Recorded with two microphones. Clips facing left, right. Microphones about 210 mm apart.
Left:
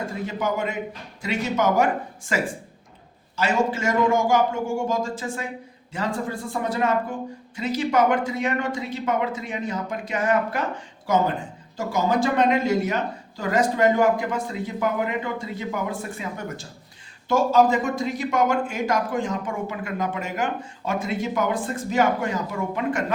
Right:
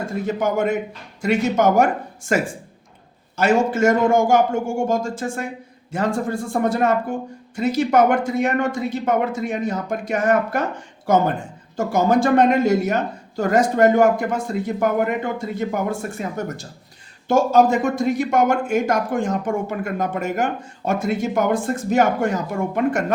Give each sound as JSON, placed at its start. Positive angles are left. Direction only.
{"t": 0.3, "sound": "speech", "side_deg": -50}